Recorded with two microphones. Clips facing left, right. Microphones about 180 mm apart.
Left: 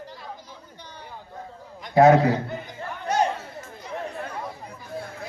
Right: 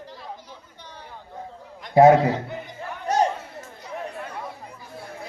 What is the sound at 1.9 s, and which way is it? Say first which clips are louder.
Speech: right 1 dB; 25° right (ahead or behind).